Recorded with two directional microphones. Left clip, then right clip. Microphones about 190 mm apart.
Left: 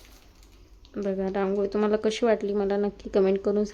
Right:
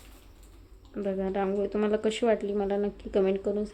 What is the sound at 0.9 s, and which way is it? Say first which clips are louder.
Speech: left 2 dB; 15° left (ahead or behind).